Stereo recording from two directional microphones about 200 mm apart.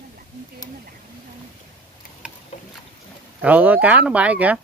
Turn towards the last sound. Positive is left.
turn(degrees=-5)  # may be behind; listen again after turning